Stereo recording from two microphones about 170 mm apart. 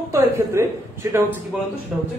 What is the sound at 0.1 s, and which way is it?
A man's voice, 15° right (ahead or behind).